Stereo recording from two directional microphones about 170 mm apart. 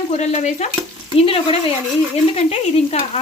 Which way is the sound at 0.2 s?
40° left (ahead or behind).